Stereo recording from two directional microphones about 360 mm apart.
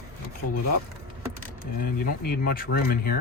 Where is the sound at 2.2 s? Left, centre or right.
Left.